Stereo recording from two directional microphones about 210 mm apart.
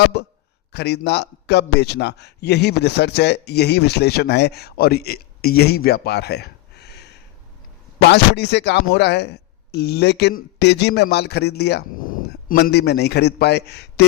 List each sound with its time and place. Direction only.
0.0 s a man's voice: 50° left (ahead or behind)